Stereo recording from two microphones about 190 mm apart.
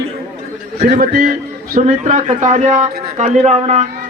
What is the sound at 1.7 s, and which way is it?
Speech, 40° right (ahead or behind).